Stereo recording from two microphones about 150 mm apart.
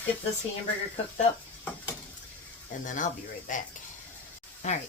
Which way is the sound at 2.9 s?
60° left (ahead or behind).